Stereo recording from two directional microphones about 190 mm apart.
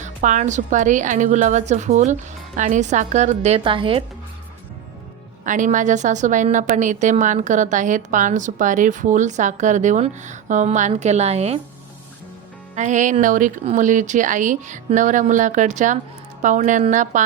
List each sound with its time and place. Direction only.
0.0 s a woman's voice: 40° right (ahead or behind)
5.5 s a woman's voice: 40° right (ahead or behind)
12.7 s a woman's voice: 40° right (ahead or behind)